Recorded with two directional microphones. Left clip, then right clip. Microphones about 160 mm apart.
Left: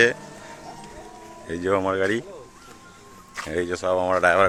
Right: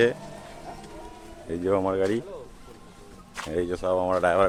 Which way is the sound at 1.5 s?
Centre (ahead or behind).